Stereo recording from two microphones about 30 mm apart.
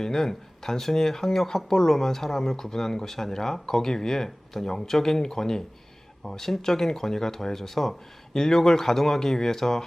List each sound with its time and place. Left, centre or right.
0.0 s speech: centre